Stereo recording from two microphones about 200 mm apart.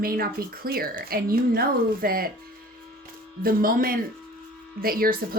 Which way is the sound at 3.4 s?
45° right (ahead or behind).